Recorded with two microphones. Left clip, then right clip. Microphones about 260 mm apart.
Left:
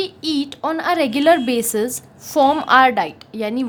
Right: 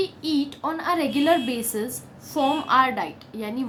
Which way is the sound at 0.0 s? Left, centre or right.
Left.